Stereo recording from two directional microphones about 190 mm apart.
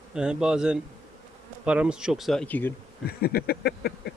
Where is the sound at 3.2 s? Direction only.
55° left (ahead or behind).